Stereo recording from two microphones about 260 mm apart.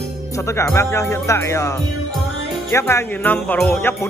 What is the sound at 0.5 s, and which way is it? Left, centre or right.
Jingle bell, centre.